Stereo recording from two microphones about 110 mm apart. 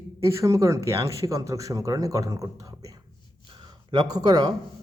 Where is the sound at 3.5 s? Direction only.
45° right (ahead or behind).